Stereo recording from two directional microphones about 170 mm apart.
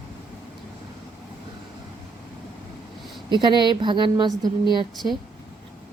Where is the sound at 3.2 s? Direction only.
25° right (ahead or behind).